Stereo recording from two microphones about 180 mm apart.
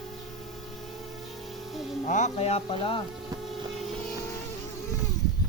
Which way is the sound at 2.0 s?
40° left (ahead or behind).